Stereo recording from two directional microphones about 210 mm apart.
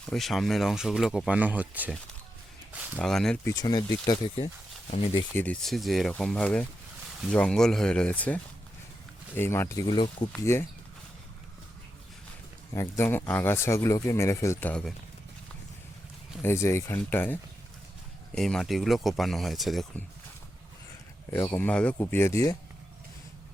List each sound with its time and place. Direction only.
0.0 s speech: centre (ahead or behind)
3.0 s speech: centre (ahead or behind)
3.5 s speech: 20° left (ahead or behind)
5.3 s speech: 5° left (ahead or behind)
12.7 s speech: 15° left (ahead or behind)
16.4 s speech: 10° left (ahead or behind)
18.3 s speech: centre (ahead or behind)
21.2 s speech: 10° left (ahead or behind)